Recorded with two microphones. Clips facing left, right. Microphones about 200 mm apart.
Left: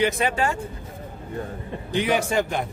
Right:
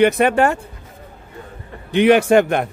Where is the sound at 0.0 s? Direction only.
60° right (ahead or behind).